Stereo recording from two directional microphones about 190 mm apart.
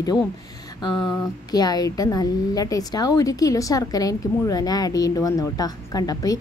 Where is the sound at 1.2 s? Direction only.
20° left (ahead or behind).